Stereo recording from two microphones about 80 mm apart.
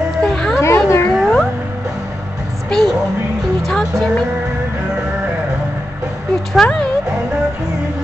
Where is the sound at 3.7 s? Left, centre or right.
Centre.